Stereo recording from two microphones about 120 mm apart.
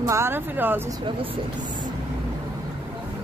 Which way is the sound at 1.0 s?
45° right (ahead or behind).